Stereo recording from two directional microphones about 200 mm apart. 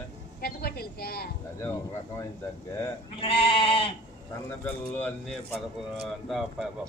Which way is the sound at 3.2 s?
30° left (ahead or behind).